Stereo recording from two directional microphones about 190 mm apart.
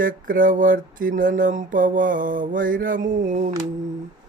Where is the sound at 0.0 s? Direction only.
45° right (ahead or behind).